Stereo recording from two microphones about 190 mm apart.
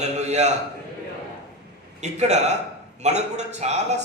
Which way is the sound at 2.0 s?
35° right (ahead or behind).